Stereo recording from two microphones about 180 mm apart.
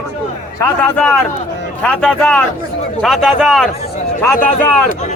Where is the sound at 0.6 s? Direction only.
10° left (ahead or behind).